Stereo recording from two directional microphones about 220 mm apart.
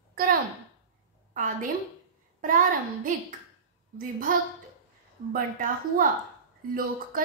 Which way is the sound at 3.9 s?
40° right (ahead or behind).